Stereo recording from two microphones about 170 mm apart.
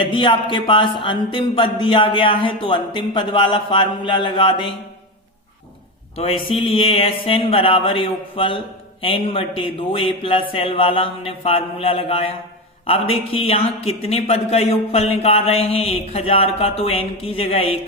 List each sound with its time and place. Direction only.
0.0 s speech: 30° left (ahead or behind)
6.1 s a man's voice: 35° left (ahead or behind)